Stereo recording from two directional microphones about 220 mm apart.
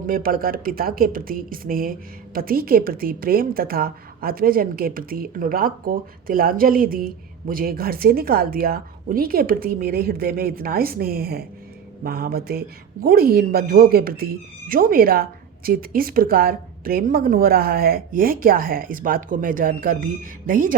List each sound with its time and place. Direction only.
0.1 s a woman's voice: 40° right (ahead or behind)